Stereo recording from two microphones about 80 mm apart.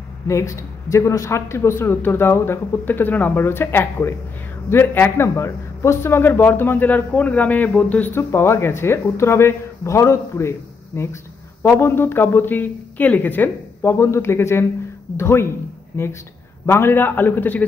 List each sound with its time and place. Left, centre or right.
0.3 s speech: left; by 8.1 s centre
8.1 s speech: left